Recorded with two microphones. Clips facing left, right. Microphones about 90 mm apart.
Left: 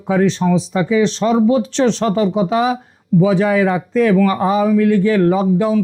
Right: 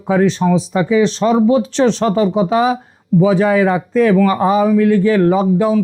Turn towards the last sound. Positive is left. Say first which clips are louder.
# right 1 dB
turn(degrees=-35)  # may be behind; listen again after turning